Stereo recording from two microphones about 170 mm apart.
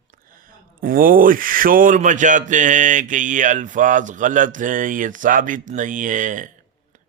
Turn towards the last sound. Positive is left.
turn(degrees=-50)  # may be behind; listen again after turning